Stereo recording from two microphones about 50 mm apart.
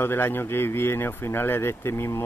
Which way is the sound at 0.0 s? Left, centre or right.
Left.